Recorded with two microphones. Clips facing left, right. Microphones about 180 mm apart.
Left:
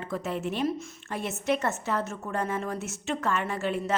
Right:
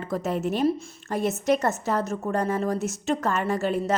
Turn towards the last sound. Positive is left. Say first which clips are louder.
# right 5 dB
turn(degrees=-40)  # may be behind; listen again after turning